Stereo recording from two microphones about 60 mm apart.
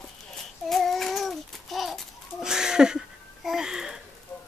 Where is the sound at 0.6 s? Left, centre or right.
Centre.